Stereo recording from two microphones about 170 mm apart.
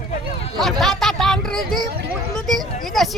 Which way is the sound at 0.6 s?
Centre (ahead or behind).